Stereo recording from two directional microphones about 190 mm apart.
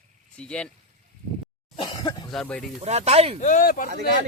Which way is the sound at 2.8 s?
35° right (ahead or behind).